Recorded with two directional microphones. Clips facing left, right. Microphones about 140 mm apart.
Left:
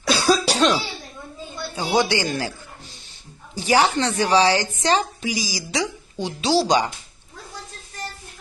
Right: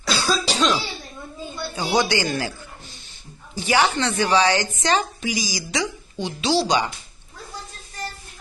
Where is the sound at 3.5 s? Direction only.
35° left (ahead or behind).